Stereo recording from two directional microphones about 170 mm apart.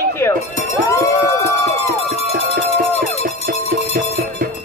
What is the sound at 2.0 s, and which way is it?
Music, 40° left (ahead or behind).